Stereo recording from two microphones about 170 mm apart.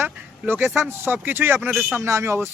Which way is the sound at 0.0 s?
15° right (ahead or behind).